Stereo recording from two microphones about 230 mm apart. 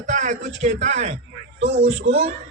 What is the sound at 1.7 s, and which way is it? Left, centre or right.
Speech, right.